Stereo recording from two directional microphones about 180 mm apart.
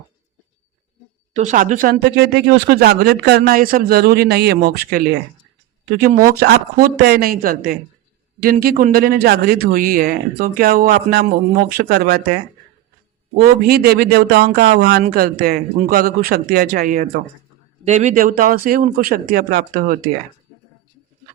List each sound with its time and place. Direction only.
1.3 s speech: 45° right (ahead or behind); by 12.4 s 65° right (ahead or behind)
13.4 s speech: 55° right (ahead or behind)
15.0 s a man's voice: 55° right (ahead or behind)